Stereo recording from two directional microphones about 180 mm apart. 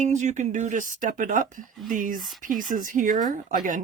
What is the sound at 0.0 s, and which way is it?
Speech, 40° right (ahead or behind).